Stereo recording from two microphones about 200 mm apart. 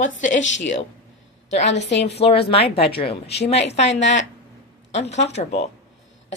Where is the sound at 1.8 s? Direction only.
60° left (ahead or behind).